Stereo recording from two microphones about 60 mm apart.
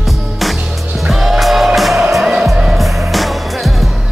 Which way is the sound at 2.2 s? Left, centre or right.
Centre.